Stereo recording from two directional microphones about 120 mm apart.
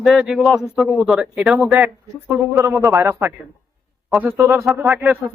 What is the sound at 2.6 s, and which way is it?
Speech, 25° right (ahead or behind).